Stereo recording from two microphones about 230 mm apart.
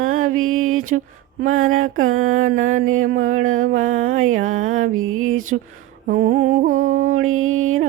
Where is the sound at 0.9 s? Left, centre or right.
Right.